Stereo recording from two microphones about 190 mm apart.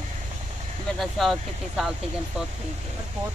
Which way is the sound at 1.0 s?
Centre (ahead or behind).